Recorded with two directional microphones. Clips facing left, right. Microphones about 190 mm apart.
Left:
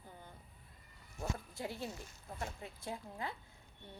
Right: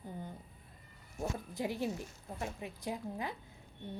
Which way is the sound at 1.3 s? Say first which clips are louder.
Right 6 dB; 20° right (ahead or behind).